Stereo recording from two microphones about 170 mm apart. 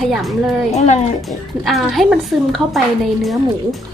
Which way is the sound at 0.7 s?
40° left (ahead or behind).